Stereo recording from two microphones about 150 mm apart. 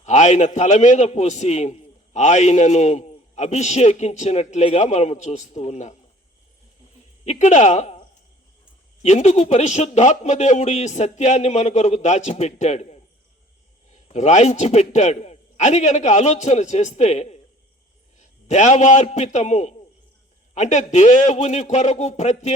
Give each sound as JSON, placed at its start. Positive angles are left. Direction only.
{"t": 0.0, "sound": "a man's voice", "side_deg": 50}
{"t": 7.3, "sound": "a man's voice", "side_deg": 50}
{"t": 9.0, "sound": "a man's voice", "side_deg": 50}